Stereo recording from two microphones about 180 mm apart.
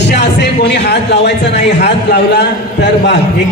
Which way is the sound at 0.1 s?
70° left (ahead or behind).